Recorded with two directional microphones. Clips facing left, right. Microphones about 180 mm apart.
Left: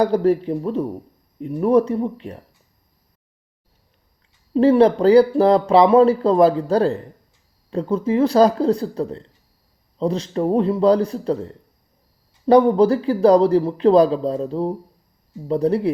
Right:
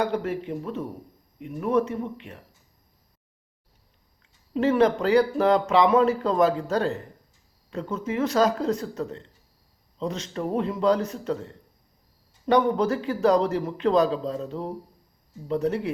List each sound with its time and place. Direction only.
0.0 s speech: 35° left (ahead or behind)
4.5 s speech: 35° left (ahead or behind)